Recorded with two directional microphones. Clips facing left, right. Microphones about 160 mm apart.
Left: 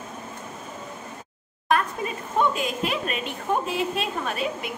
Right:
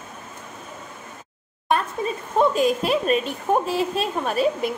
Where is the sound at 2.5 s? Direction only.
35° right (ahead or behind).